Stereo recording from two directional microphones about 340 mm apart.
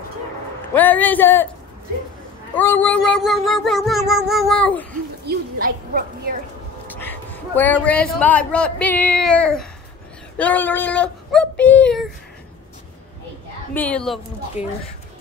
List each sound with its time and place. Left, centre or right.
0.7 s a man's voice: centre
2.5 s a man's voice: centre
5.2 s speech: right
7.0 s a man's voice: centre
13.7 s a man's voice: centre